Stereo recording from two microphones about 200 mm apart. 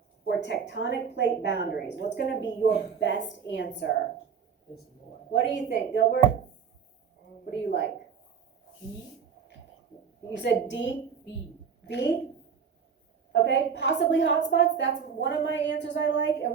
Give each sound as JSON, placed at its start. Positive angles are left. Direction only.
{"t": 0.3, "sound": "a woman's voice", "side_deg": 60}
{"t": 5.3, "sound": "a woman's voice", "side_deg": 65}
{"t": 10.3, "sound": "a woman's voice", "side_deg": 65}
{"t": 13.3, "sound": "a woman's voice", "side_deg": 60}